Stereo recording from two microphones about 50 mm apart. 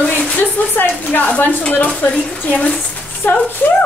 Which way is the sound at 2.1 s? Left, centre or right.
Centre.